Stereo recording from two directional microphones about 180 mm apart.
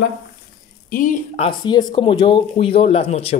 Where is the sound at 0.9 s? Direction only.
45° left (ahead or behind).